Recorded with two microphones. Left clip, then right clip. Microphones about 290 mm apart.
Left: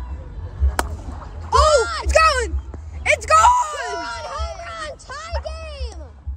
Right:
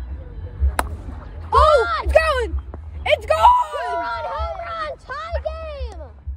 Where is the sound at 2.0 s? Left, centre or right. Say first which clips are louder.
Left 1 dB; centre.